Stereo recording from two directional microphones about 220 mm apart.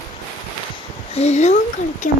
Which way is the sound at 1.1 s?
30° left (ahead or behind).